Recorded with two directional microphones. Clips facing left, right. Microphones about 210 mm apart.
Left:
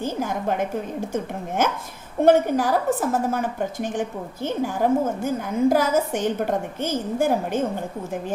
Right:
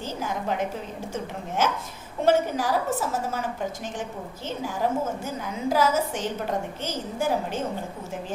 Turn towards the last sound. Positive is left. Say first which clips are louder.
# left 5 dB
turn(degrees=50)  # may be behind; listen again after turning